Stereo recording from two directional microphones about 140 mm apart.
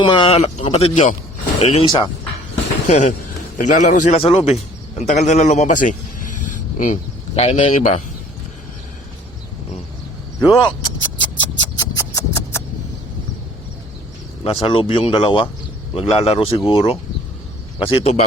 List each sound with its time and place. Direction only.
0.0 s speech: 40° left (ahead or behind)
2.8 s a man's voice: 55° left (ahead or behind)
4.2 s a man's voice: 45° left (ahead or behind)
10.4 s music: 30° left (ahead or behind)
14.4 s speech: 40° left (ahead or behind)